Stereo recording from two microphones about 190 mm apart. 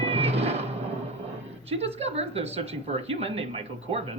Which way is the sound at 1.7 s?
35° right (ahead or behind).